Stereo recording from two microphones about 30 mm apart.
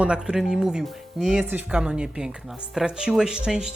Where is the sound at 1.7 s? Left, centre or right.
Right.